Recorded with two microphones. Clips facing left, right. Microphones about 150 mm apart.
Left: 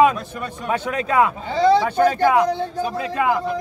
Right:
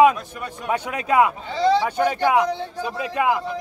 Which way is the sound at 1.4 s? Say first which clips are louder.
Left 3 dB; 45° left (ahead or behind).